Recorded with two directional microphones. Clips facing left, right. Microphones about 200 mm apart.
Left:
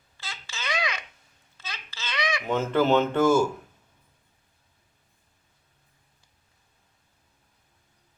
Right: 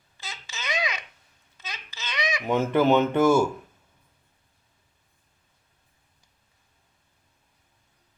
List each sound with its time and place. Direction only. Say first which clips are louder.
0.2 s babbling: even; 20° right (ahead or behind)